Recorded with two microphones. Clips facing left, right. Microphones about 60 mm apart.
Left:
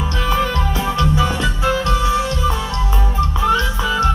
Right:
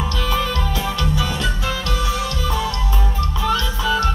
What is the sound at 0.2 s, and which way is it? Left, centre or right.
Music, left.